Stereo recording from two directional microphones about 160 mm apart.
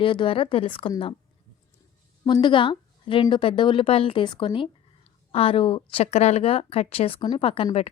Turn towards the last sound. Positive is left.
turn(degrees=35)  # may be behind; listen again after turning